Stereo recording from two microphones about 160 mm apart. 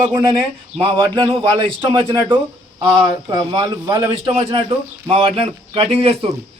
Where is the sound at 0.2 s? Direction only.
25° right (ahead or behind).